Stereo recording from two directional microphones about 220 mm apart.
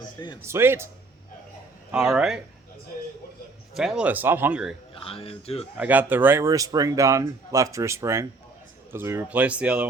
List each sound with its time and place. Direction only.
0.4 s speech: 10° right (ahead or behind)
1.9 s speech: 5° right (ahead or behind)
3.8 s speech: 5° right (ahead or behind)
4.9 s speech: 25° left (ahead or behind)
5.7 s speech: 5° right (ahead or behind)